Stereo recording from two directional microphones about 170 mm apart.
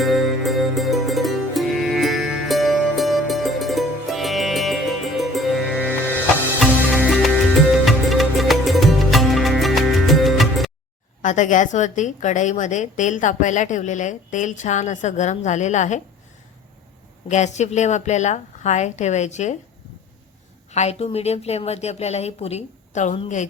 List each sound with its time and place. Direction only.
0.0 s music: centre (ahead or behind)
11.2 s a woman's voice: 45° left (ahead or behind)
17.2 s a woman's voice: 40° left (ahead or behind)
20.7 s speech: 40° left (ahead or behind)